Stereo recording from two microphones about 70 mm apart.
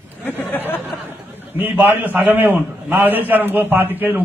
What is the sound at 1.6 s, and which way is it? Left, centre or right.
A man's voice, right.